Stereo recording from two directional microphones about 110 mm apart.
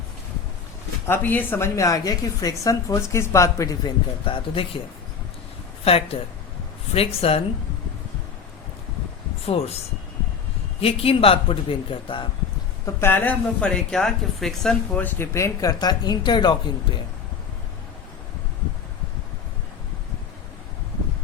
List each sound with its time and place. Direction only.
1.0 s a woman's voice: 20° left (ahead or behind)
4.3 s speech: 55° left (ahead or behind)
5.8 s speech: 60° left (ahead or behind)
9.5 s speech: 65° left (ahead or behind)
10.8 s speech: 60° left (ahead or behind)
12.8 s speech: 20° left (ahead or behind); by 14.8 s 5° left (ahead or behind)
14.9 s speech: 20° left (ahead or behind); by 16.6 s 40° left (ahead or behind)